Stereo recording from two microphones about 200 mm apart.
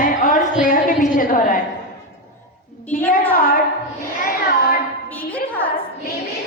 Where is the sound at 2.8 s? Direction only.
10° left (ahead or behind).